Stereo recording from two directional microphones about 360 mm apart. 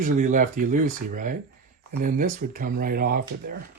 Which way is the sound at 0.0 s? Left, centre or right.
Right.